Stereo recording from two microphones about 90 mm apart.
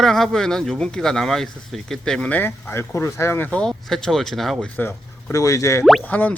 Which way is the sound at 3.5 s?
5° left (ahead or behind).